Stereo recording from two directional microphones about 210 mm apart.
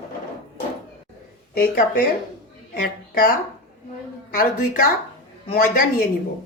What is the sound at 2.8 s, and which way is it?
Speech, 40° left (ahead or behind).